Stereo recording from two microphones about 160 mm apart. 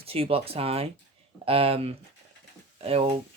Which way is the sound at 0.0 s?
35° right (ahead or behind).